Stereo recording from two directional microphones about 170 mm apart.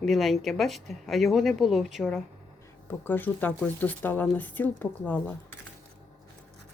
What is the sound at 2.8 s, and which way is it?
Speech, 10° left (ahead or behind).